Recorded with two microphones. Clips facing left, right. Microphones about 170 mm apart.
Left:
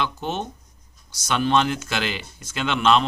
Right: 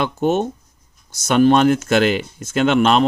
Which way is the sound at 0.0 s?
45° right (ahead or behind).